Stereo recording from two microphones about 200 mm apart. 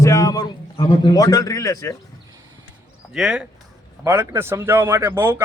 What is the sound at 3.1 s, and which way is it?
A man's voice, centre (ahead or behind).